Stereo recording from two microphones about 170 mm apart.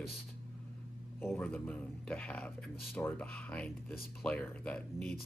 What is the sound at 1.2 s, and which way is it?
Speech, 10° left (ahead or behind).